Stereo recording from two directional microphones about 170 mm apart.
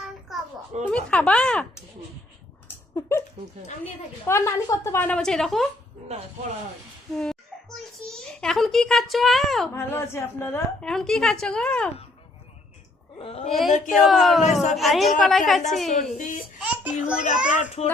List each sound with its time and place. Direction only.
0.9 s speech: 5° left (ahead or behind)
2.9 s a sound: 15° left (ahead or behind)
4.3 s a woman's voice: 15° left (ahead or behind)
7.1 s a woman's voice: 5° left (ahead or behind)
9.7 s a woman's voice: 15° left (ahead or behind)
13.1 s a woman's voice: 35° left (ahead or behind)
13.5 s a woman's voice: centre (ahead or behind)
13.7 s speech: 50° left (ahead or behind)
14.1 s a woman's voice: centre (ahead or behind)
15.9 s speech: 45° left (ahead or behind)
16.6 s a sound: 5° right (ahead or behind)
17.8 s a woman's voice: 40° left (ahead or behind)